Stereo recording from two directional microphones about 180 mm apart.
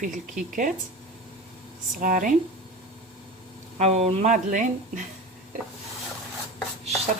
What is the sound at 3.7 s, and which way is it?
Speech, 35° right (ahead or behind).